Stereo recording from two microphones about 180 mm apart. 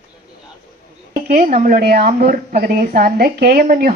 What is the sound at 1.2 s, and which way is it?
A woman's voice, 40° right (ahead or behind).